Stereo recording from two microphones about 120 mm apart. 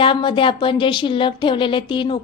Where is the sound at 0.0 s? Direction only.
45° left (ahead or behind).